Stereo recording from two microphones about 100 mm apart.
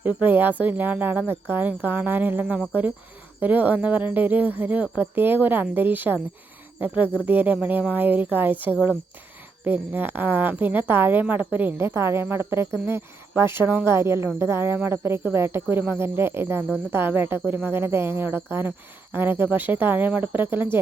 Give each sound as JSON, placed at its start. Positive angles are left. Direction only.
{"t": 0.0, "sound": "a woman's voice", "side_deg": -20}